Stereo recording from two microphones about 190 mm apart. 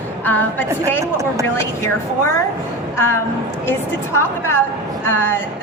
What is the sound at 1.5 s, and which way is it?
Speech, 15° left (ahead or behind).